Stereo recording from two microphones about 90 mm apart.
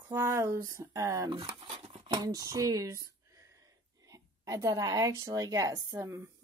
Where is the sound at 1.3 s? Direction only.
55° right (ahead or behind).